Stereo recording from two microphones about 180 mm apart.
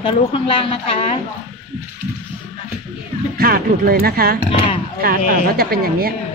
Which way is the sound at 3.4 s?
55° right (ahead or behind).